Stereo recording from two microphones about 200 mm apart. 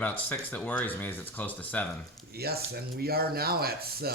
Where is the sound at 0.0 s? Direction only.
10° left (ahead or behind).